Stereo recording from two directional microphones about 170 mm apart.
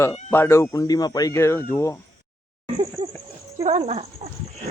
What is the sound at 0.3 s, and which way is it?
Speech, 15° left (ahead or behind).